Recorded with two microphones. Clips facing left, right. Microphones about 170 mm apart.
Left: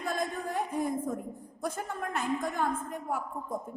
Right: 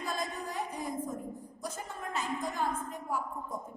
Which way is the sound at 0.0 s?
55° left (ahead or behind).